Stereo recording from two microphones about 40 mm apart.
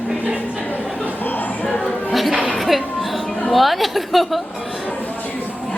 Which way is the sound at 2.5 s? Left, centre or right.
Centre.